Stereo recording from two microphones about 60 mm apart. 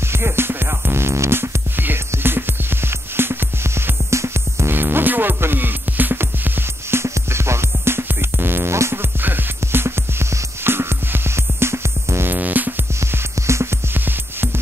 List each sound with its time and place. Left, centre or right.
0.1 s music: right
4.7 s music: right
12.3 s music: right
13.0 s music: right
13.9 s music: right